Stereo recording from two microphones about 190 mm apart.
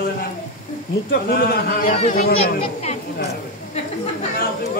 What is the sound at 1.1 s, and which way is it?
Speech, 50° left (ahead or behind).